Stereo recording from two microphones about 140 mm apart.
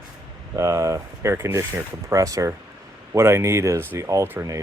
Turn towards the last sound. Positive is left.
turn(degrees=-20)  # may be behind; listen again after turning